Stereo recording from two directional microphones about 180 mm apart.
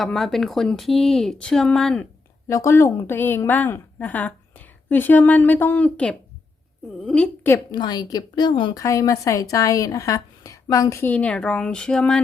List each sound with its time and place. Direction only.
0.0 s speech: centre (ahead or behind)
2.5 s a woman's voice: 15° left (ahead or behind)